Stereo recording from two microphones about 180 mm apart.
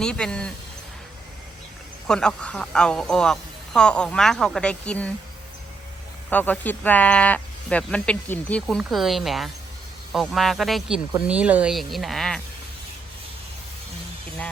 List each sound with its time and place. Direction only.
0.0 s speech: 5° left (ahead or behind)
2.0 s speech: 5° left (ahead or behind)
6.3 s speech: 10° left (ahead or behind)